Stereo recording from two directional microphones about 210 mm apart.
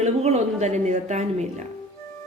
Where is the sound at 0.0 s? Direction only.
30° right (ahead or behind).